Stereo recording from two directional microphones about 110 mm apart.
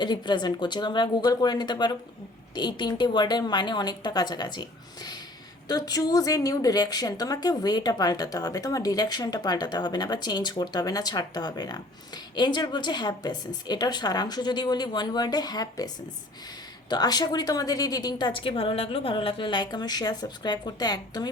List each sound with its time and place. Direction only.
0.0 s a woman's voice: 40° left (ahead or behind)
5.6 s a woman's voice: 35° left (ahead or behind)
16.9 s a woman's voice: 35° left (ahead or behind)